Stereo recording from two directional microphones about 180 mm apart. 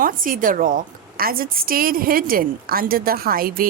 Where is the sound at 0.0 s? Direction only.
50° right (ahead or behind).